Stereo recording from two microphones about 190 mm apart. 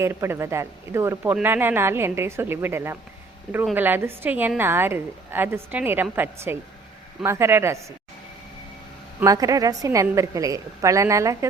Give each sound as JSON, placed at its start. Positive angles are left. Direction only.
{"t": 0.0, "sound": "a woman's voice", "side_deg": -15}
{"t": 9.2, "sound": "a woman's voice", "side_deg": -20}